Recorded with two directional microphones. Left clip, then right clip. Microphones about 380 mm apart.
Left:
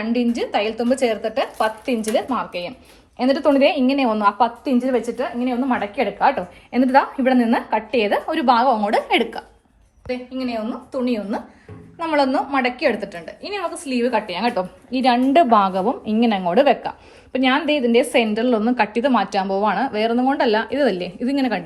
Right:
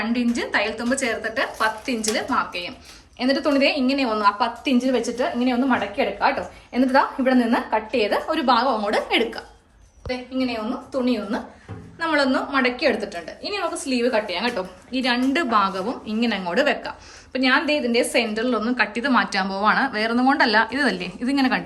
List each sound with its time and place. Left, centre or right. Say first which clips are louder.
0.1 s a woman's voice: left 2 dB; centre